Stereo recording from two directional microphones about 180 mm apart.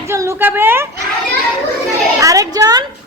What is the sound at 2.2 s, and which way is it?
Speech, 20° right (ahead or behind).